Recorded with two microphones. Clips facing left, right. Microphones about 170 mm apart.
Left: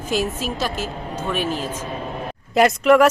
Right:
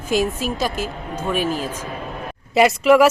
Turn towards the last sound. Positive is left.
turn(degrees=-5)  # may be behind; listen again after turning